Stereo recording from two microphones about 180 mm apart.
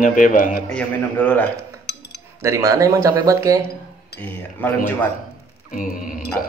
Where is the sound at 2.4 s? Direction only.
15° right (ahead or behind).